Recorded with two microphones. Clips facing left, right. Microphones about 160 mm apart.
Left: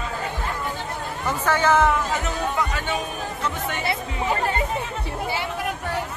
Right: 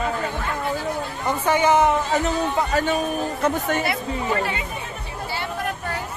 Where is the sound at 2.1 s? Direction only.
35° right (ahead or behind).